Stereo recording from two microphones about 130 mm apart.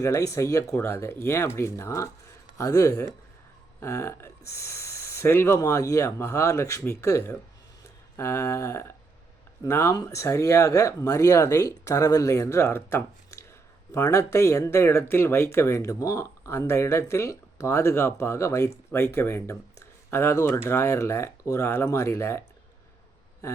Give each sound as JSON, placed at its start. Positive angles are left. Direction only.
{"t": 0.0, "sound": "speech", "side_deg": 25}